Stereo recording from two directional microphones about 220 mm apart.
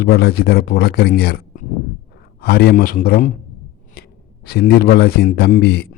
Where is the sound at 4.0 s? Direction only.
45° left (ahead or behind).